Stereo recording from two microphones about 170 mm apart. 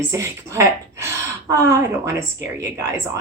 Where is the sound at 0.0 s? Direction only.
15° right (ahead or behind).